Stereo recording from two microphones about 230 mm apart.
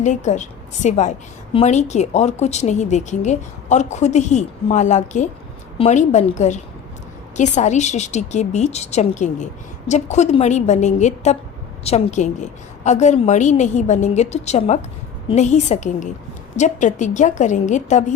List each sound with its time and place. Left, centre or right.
0.0 s a woman's voice: left